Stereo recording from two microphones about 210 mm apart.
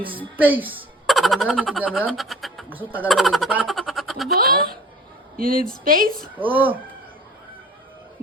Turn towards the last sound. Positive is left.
turn(degrees=-10)  # may be behind; listen again after turning